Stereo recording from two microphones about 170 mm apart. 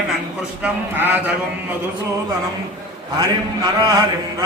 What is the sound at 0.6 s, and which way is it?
Speech, 10° right (ahead or behind).